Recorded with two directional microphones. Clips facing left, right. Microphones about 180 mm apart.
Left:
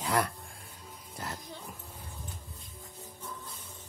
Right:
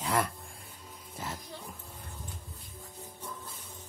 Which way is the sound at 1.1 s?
Centre (ahead or behind).